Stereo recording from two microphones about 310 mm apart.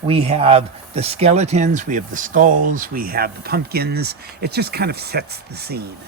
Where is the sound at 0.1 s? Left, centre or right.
Centre.